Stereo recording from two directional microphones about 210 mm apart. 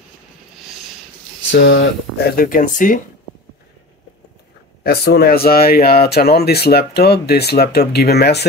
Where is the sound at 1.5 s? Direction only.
60° left (ahead or behind); by 3.0 s 40° left (ahead or behind).